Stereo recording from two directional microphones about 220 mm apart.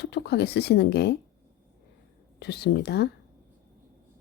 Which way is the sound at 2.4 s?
50° left (ahead or behind).